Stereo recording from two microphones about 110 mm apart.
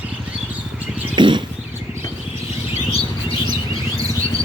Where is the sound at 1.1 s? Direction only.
45° right (ahead or behind).